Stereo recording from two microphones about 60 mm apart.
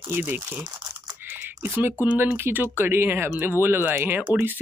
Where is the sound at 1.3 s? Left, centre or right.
Right.